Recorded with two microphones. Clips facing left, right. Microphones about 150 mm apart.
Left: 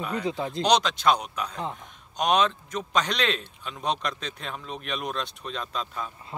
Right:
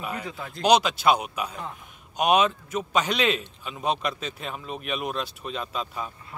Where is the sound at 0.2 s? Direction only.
30° left (ahead or behind).